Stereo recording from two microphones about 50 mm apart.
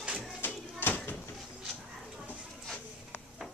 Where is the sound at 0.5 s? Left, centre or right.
Left.